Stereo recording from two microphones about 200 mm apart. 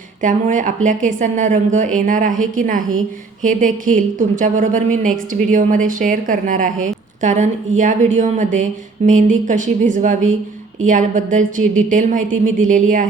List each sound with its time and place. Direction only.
0.2 s a woman's voice: 40° right (ahead or behind)